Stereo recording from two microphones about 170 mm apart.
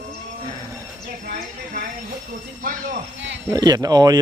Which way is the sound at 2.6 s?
50° right (ahead or behind).